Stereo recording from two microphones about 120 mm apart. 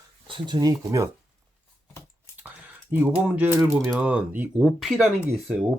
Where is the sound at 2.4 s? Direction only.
15° right (ahead or behind).